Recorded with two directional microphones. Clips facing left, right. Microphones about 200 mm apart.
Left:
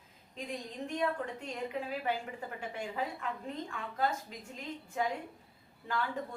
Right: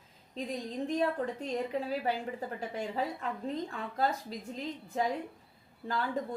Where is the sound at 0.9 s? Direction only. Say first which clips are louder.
Right 2 dB; 35° right (ahead or behind).